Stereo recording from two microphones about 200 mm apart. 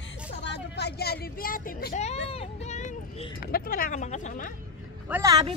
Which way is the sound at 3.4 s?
45° left (ahead or behind).